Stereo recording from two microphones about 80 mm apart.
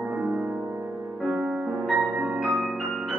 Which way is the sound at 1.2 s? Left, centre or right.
Centre.